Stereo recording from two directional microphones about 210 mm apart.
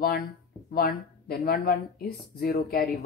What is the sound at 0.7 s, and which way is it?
Speech, 45° left (ahead or behind).